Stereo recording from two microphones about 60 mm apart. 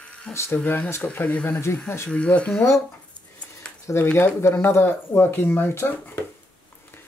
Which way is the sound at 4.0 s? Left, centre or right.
Left.